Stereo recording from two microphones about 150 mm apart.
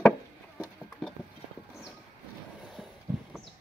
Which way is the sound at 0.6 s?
5° left (ahead or behind).